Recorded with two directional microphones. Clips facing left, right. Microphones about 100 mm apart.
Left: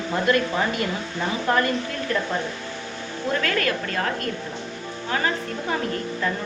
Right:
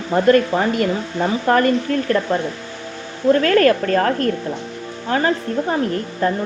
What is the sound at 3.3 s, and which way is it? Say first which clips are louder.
Speech: right 11 dB; 40° right (ahead or behind).